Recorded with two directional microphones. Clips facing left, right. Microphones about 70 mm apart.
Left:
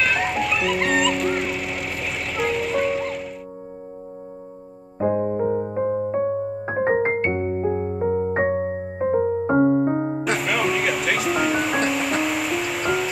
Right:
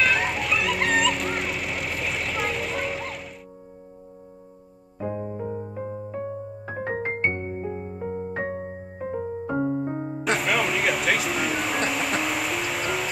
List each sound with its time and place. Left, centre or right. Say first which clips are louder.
0.0 s music: left 2 dB; centre
4.9 s music: left 9 dB; left
10.2 s music: right 3 dB; centre